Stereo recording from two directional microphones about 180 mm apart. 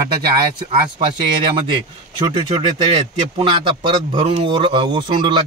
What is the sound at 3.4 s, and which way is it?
A man's voice, 30° right (ahead or behind).